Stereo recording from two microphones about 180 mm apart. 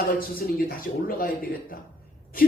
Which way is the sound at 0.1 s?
55° left (ahead or behind).